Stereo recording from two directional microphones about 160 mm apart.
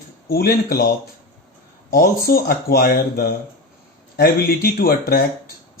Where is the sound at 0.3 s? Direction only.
70° left (ahead or behind).